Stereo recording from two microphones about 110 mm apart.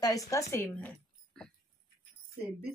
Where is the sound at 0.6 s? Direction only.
15° left (ahead or behind).